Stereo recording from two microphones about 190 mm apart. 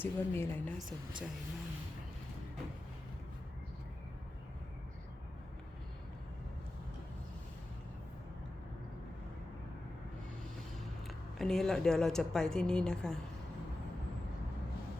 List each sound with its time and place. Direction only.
0.0 s speech: 10° left (ahead or behind)
0.8 s a woman's voice: centre (ahead or behind)
11.3 s a woman's voice: centre (ahead or behind)